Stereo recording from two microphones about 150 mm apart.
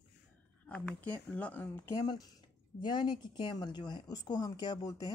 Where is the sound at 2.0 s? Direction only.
25° left (ahead or behind).